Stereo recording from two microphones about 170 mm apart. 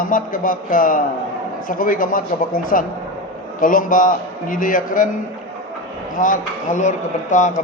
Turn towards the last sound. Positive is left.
turn(degrees=45)  # may be behind; listen again after turning